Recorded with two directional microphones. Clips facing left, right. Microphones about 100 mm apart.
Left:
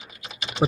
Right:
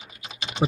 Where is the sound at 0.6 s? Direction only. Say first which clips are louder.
Left 2 dB; 25° left (ahead or behind).